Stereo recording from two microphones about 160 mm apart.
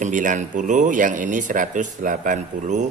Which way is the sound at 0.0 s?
55° right (ahead or behind).